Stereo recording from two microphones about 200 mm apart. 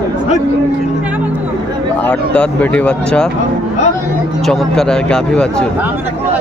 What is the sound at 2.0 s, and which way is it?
Speech, 5° left (ahead or behind).